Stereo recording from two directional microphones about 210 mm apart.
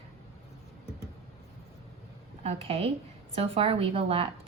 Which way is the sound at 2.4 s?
30° right (ahead or behind).